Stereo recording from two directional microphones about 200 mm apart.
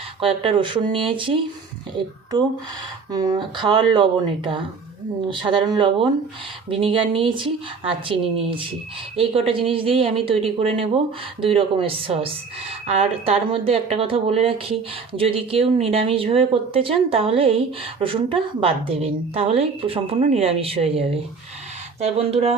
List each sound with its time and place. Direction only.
0.2 s speech: 25° right (ahead or behind)
3.1 s speech: 20° right (ahead or behind)